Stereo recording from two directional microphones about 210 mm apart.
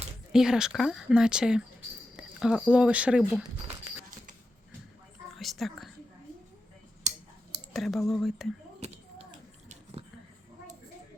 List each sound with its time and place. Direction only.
0.3 s speech: centre (ahead or behind)
5.4 s a sound: centre (ahead or behind)
7.1 s clicking: 35° right (ahead or behind)
7.7 s speech: centre (ahead or behind)